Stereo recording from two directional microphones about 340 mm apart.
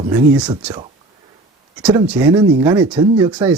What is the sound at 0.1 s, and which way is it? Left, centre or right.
Speech, centre.